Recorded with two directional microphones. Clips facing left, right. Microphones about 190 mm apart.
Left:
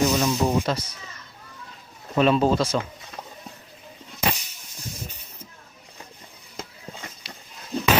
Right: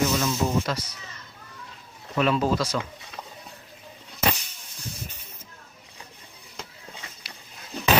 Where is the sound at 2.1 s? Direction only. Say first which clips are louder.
Left 4 dB; 25° left (ahead or behind).